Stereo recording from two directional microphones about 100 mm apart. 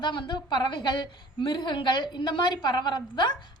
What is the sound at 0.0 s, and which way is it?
A woman's voice, 50° left (ahead or behind).